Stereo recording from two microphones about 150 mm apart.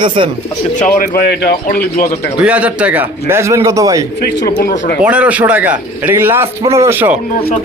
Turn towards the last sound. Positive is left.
turn(degrees=-15)  # may be behind; listen again after turning